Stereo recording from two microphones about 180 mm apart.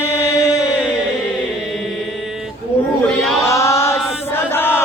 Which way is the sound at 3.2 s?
Centre (ahead or behind).